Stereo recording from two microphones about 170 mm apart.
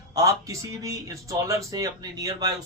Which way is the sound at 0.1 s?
20° right (ahead or behind).